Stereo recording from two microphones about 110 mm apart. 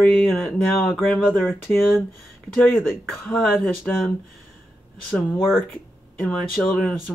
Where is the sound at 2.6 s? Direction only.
20° left (ahead or behind).